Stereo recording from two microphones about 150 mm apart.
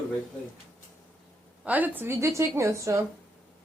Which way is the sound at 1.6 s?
10° right (ahead or behind).